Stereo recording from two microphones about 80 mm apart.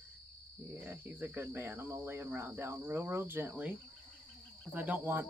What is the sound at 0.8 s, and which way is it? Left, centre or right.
Speech, right.